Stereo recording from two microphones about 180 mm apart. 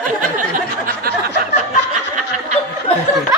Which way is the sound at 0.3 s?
50° right (ahead or behind).